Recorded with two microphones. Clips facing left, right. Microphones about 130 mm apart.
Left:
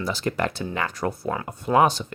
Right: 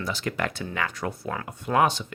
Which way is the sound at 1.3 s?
25° left (ahead or behind).